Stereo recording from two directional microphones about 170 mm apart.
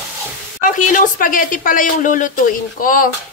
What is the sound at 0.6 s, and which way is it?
Speech, 50° left (ahead or behind).